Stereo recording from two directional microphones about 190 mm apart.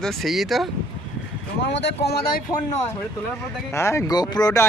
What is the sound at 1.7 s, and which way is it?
Speech, 65° left (ahead or behind).